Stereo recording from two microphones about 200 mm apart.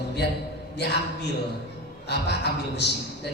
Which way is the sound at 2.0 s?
55° left (ahead or behind).